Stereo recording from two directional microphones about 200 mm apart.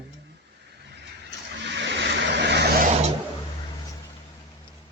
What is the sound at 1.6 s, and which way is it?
Vehicle, 60° right (ahead or behind).